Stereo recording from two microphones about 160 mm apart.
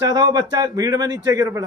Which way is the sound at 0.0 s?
25° right (ahead or behind).